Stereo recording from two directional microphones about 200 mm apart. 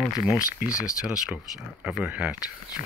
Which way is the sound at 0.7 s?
15° left (ahead or behind).